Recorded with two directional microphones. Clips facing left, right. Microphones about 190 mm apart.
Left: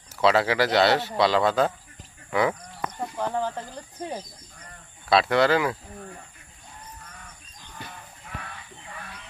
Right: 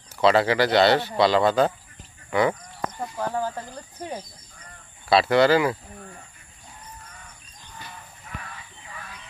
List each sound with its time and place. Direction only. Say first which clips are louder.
0.1 s speech: right 2 dB; centre (ahead or behind)
5.1 s speech: right 2 dB; centre (ahead or behind)
7.8 s fowl: left 2 dB; 60° left (ahead or behind)